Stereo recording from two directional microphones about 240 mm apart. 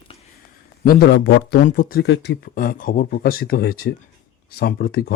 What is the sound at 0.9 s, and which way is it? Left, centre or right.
Speech, left.